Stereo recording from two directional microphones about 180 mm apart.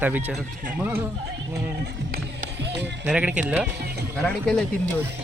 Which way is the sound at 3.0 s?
5° right (ahead or behind).